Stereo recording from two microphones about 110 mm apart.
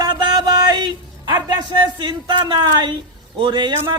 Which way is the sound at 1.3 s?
40° right (ahead or behind).